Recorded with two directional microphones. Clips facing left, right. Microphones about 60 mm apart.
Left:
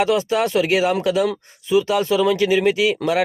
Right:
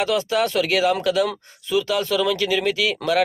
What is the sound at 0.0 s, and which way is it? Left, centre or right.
Speech, left.